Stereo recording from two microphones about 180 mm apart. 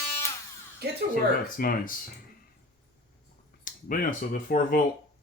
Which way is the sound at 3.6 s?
50° left (ahead or behind).